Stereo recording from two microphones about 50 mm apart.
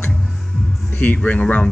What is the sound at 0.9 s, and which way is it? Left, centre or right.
Speech, left.